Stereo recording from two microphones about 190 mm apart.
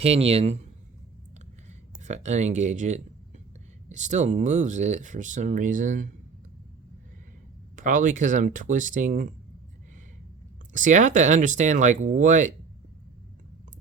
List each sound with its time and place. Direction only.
0.0 s speech: 30° right (ahead or behind)
2.0 s speech: 35° right (ahead or behind)
7.8 s speech: 45° right (ahead or behind)
10.7 s speech: 40° right (ahead or behind)